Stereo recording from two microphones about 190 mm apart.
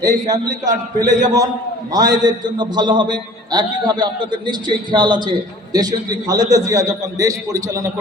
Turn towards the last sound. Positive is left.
turn(degrees=-20)  # may be behind; listen again after turning